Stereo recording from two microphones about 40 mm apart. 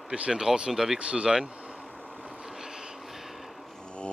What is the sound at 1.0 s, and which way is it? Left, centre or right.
Speech, right.